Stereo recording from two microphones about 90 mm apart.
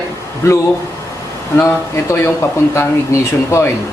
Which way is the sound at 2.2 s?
30° left (ahead or behind).